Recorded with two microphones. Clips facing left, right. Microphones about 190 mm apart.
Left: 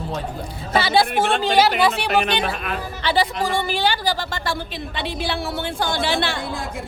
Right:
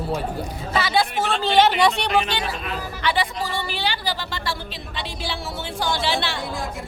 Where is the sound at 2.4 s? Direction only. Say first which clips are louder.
Left 3 dB; 55° left (ahead or behind).